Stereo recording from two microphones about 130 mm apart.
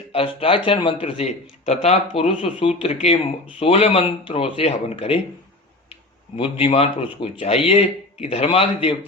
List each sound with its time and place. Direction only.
0.3 s speech: 45° left (ahead or behind)
6.3 s speech: 45° left (ahead or behind)